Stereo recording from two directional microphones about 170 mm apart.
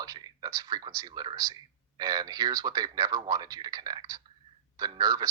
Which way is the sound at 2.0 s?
25° right (ahead or behind).